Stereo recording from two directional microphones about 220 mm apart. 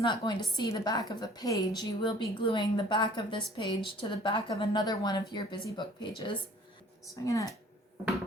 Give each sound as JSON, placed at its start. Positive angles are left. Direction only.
{"t": 0.0, "sound": "a woman's voice", "side_deg": 20}